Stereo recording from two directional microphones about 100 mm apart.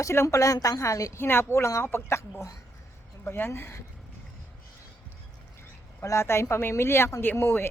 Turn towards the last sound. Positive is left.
turn(degrees=25)  # may be behind; listen again after turning